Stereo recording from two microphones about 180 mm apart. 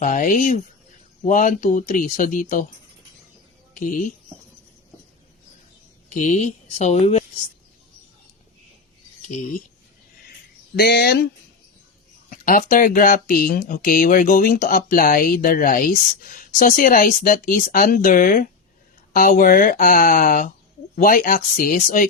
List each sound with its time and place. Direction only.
0.0 s speech: 45° left (ahead or behind)
3.8 s speech: 45° left (ahead or behind)
6.1 s speech: 40° left (ahead or behind)
10.8 s speech: 60° left (ahead or behind)
12.3 s speech: 50° left (ahead or behind)